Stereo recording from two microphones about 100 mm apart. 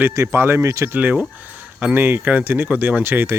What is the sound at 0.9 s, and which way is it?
Speech, 15° right (ahead or behind).